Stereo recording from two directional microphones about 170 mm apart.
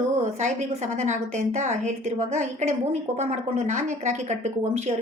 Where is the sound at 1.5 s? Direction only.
45° right (ahead or behind).